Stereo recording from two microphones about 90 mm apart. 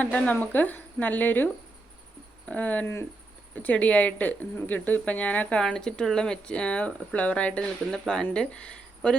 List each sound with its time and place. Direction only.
0.0 s speech: 15° left (ahead or behind)
2.5 s speech: 15° left (ahead or behind)